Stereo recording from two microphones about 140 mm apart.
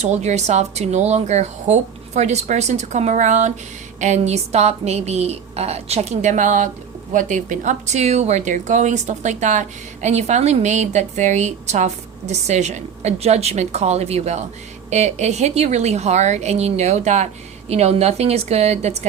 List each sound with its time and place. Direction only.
0.0 s speech: 50° right (ahead or behind)